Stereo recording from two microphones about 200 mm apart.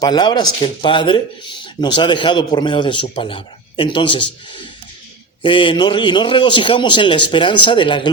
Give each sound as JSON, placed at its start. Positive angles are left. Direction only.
{"t": 0.0, "sound": "speech", "side_deg": 20}
{"t": 5.4, "sound": "speech", "side_deg": 25}